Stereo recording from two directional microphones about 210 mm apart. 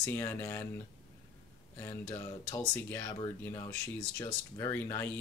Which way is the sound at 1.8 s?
10° left (ahead or behind).